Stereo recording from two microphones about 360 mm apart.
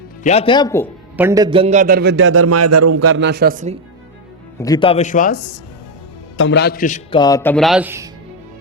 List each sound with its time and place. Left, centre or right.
0.2 s a man's voice: centre
1.1 s a man's voice: centre
4.6 s a man's voice: centre